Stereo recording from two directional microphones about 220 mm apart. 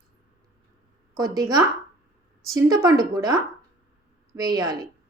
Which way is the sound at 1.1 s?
15° right (ahead or behind).